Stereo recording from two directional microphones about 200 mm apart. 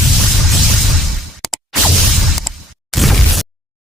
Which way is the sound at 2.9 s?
Centre (ahead or behind).